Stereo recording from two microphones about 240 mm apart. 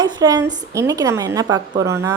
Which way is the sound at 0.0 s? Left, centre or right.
Centre.